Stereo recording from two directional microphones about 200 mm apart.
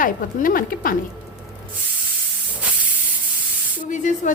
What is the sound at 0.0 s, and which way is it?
Speech, 45° left (ahead or behind).